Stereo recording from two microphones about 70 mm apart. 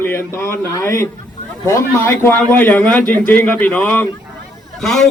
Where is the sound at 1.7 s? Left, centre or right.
Left.